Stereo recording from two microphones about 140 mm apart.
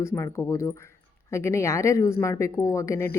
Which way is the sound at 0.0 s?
20° left (ahead or behind).